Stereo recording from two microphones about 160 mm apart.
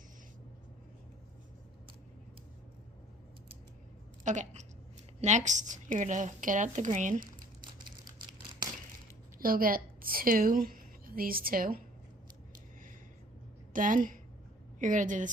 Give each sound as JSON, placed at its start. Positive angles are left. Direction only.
{"t": 4.2, "sound": "a woman's voice", "side_deg": -50}
{"t": 7.6, "sound": "crumpling", "side_deg": -30}
{"t": 9.4, "sound": "a woman's voice", "side_deg": -65}
{"t": 13.7, "sound": "a woman's voice", "side_deg": -60}